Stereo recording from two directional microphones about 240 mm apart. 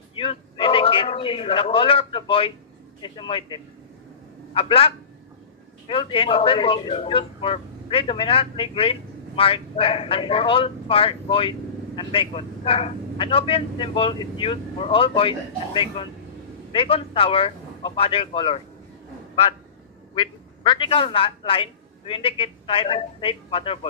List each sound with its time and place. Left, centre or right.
0.1 s a sound: left
3.0 s speech: left
20.2 s a man's voice: centre